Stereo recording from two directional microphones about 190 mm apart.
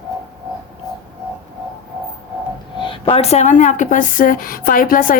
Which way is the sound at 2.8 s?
25° left (ahead or behind).